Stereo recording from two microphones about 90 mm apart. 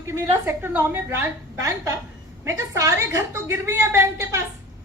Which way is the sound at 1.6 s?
35° right (ahead or behind).